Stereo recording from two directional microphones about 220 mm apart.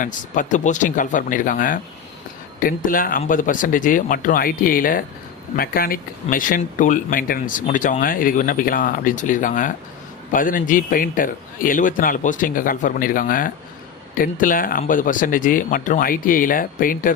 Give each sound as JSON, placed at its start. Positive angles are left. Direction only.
{"t": 0.0, "sound": "speech", "side_deg": 35}